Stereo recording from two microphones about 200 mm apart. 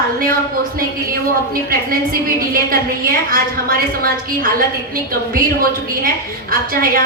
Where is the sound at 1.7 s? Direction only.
45° right (ahead or behind).